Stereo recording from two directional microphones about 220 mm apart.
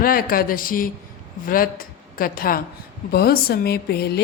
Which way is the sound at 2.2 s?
40° left (ahead or behind).